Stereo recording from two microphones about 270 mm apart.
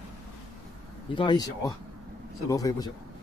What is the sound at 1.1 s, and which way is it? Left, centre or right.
Speech, centre.